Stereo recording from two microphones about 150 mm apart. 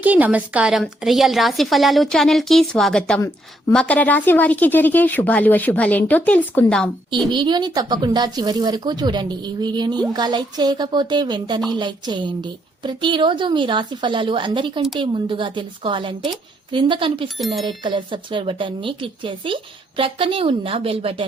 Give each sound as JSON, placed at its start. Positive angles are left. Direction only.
{"t": 0.0, "sound": "a woman's voice", "side_deg": -10}
{"t": 7.3, "sound": "a woman's voice", "side_deg": -30}
{"t": 17.4, "sound": "a woman's voice", "side_deg": 0}
{"t": 17.7, "sound": "a woman's voice", "side_deg": -30}